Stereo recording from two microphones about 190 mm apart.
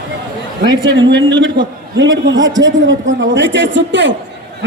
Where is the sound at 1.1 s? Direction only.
70° right (ahead or behind).